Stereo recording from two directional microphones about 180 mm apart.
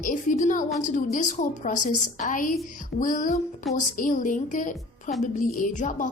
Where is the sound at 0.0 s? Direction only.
45° left (ahead or behind).